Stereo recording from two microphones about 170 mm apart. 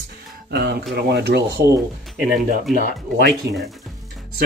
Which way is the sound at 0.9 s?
75° right (ahead or behind).